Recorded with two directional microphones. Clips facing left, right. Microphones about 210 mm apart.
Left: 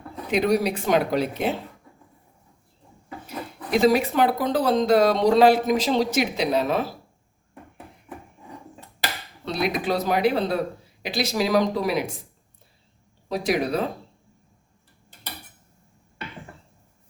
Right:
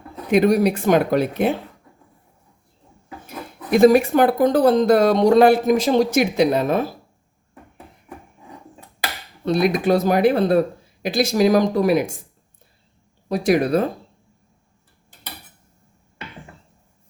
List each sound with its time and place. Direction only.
0.3 s speech: 50° right (ahead or behind)
3.7 s speech: 50° right (ahead or behind)
9.4 s speech: 50° right (ahead or behind)
13.2 s speech: 50° right (ahead or behind)